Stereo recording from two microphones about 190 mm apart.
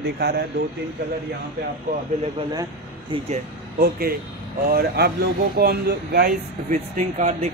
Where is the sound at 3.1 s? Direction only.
25° right (ahead or behind).